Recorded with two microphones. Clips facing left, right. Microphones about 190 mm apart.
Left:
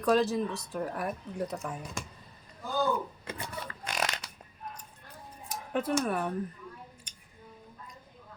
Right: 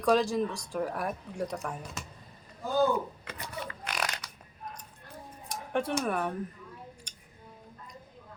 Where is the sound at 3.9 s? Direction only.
25° left (ahead or behind).